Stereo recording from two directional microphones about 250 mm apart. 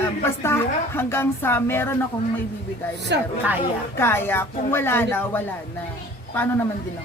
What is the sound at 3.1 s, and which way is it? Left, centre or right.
Speech, right.